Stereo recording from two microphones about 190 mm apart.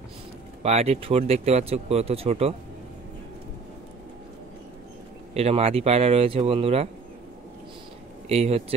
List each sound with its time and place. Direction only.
0.6 s speech: 35° right (ahead or behind)
5.3 s speech: 35° right (ahead or behind)
8.3 s speech: 35° right (ahead or behind)